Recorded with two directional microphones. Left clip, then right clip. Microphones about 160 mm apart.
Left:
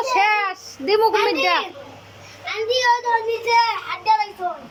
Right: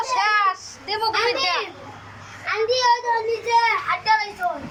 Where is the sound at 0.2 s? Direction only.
60° left (ahead or behind).